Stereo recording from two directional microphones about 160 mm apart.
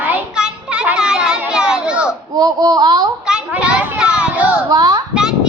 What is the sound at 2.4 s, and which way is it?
Speech, 25° right (ahead or behind).